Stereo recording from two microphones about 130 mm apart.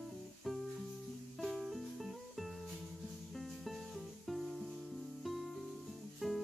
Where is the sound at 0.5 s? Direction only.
Centre (ahead or behind).